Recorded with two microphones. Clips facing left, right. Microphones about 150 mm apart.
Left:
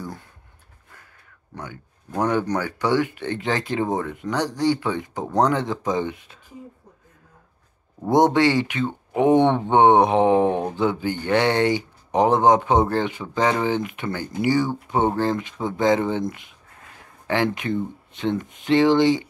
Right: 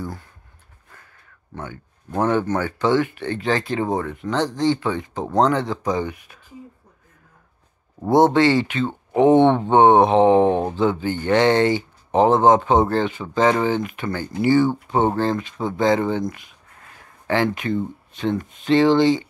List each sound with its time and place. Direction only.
1.5 s speech: 15° left (ahead or behind)
5.1 s speech: 20° right (ahead or behind)
5.4 s speech: 20° left (ahead or behind)
8.1 s speech: 15° left (ahead or behind)
10.3 s speech: 20° right (ahead or behind)
10.7 s speech: 15° left (ahead or behind)
14.7 s speech: 20° right (ahead or behind)
15.1 s speech: 20° left (ahead or behind)